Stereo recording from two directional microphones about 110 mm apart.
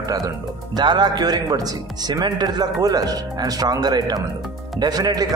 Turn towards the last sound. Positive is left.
turn(degrees=-35)  # may be behind; listen again after turning